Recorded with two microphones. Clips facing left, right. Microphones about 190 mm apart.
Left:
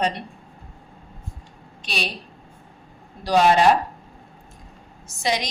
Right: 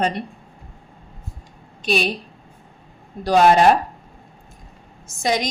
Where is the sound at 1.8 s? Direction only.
50° right (ahead or behind).